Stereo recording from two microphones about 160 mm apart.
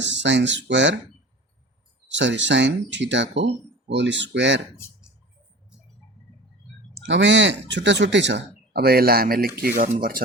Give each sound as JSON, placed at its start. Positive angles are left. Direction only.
{"t": 0.0, "sound": "speech", "side_deg": -90}
{"t": 2.0, "sound": "speech", "side_deg": -90}
{"t": 7.0, "sound": "speech", "side_deg": -90}